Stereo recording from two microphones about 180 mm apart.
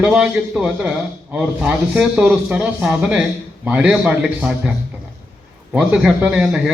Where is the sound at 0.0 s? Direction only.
5° right (ahead or behind).